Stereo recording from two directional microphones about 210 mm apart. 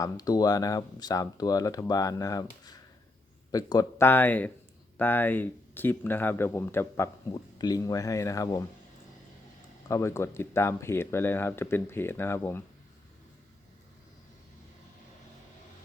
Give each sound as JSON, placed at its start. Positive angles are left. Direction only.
{"t": 0.0, "sound": "speech", "side_deg": 15}
{"t": 9.9, "sound": "speech", "side_deg": 15}